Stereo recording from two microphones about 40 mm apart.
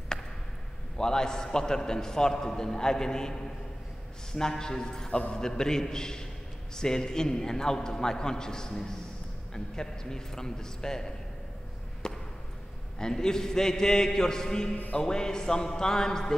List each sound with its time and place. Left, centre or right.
0.9 s a man's voice: centre
12.0 s basketball bounce: centre
13.0 s a man's voice: centre